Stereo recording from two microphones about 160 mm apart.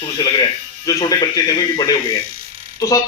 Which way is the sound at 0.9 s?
25° left (ahead or behind).